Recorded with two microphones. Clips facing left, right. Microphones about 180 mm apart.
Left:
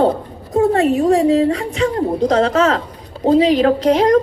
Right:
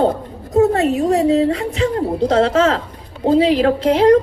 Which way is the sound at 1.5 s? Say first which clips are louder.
Even; 30° right (ahead or behind).